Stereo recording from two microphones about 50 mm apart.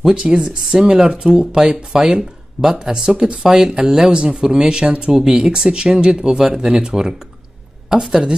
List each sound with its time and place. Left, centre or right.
0.0 s speech: centre